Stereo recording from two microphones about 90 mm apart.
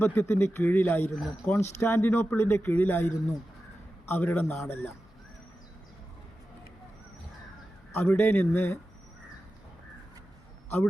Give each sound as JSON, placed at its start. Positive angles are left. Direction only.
{"t": 0.0, "sound": "speech", "side_deg": 25}
{"t": 1.1, "sound": "speech", "side_deg": -5}
{"t": 1.5, "sound": "speech", "side_deg": 25}
{"t": 4.1, "sound": "speech", "side_deg": 20}
{"t": 7.9, "sound": "speech", "side_deg": 25}